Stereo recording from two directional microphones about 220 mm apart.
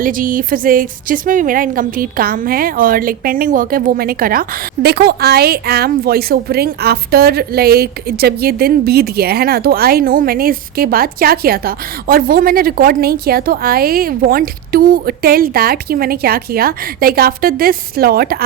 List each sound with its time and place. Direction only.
0.0 s a woman's voice: 40° right (ahead or behind)